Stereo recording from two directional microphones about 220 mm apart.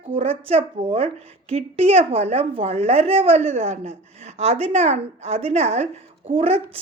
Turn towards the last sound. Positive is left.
turn(degrees=-30)  # may be behind; listen again after turning